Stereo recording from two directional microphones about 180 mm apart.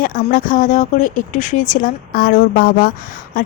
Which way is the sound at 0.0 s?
50° left (ahead or behind).